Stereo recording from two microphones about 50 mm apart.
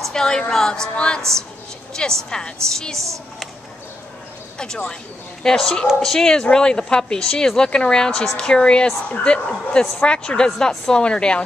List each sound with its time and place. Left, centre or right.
0.0 s a woman's voice: centre
2.2 s a woman's voice: centre
4.6 s a woman's voice: centre